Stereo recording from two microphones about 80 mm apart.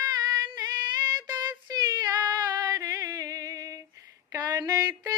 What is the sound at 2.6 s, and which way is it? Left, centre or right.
Music, right.